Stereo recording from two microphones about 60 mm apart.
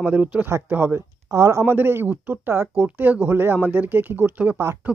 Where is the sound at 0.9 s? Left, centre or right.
Right.